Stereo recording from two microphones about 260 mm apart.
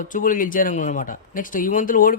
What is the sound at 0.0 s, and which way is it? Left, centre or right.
Speech, left.